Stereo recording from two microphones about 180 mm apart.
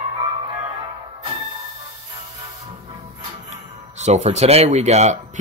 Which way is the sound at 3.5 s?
40° right (ahead or behind).